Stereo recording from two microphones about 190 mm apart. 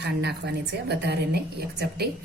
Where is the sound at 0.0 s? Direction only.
60° right (ahead or behind).